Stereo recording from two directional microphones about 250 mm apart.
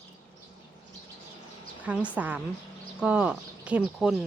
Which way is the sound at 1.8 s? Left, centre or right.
Centre.